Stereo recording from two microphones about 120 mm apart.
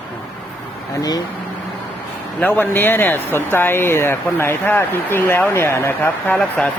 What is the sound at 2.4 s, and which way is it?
Speech, 15° left (ahead or behind).